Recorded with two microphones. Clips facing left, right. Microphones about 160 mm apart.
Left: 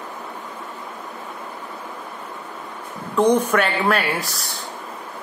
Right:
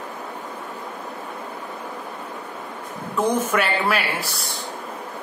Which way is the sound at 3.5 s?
5° right (ahead or behind).